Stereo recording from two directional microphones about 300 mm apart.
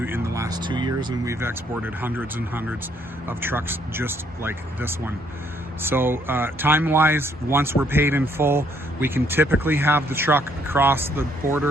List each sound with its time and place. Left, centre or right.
0.0 s speech: centre